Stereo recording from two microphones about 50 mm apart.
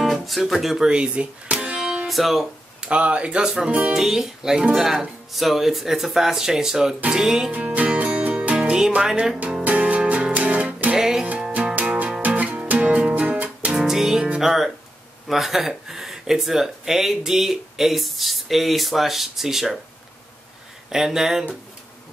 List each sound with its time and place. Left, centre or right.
0.0 s music: centre
2.0 s speech: centre
2.8 s speech: right
3.9 s speech: centre
7.5 s music: right
9.7 s music: right
11.0 s music: centre
11.5 s music: right
13.7 s music: centre
14.4 s speech: centre
20.9 s speech: centre